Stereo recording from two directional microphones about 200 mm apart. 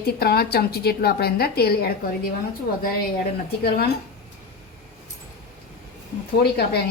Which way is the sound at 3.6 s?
55° left (ahead or behind).